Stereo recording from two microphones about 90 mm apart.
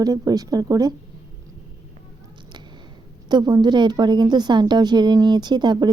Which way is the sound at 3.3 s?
50° right (ahead or behind).